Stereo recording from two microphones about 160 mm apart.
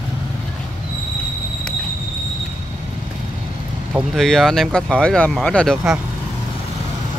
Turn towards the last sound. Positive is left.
turn(degrees=0)  # may be behind; listen again after turning